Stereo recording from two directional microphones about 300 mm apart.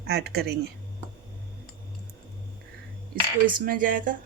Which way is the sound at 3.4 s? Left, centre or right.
Right.